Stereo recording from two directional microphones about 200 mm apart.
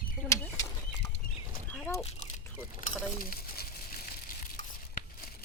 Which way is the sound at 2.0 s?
30° left (ahead or behind).